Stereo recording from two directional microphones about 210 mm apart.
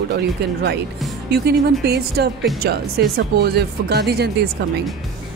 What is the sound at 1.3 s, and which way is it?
Speech, 50° right (ahead or behind).